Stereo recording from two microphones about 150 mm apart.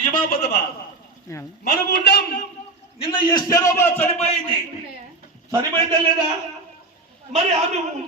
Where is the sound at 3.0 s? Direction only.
35° left (ahead or behind).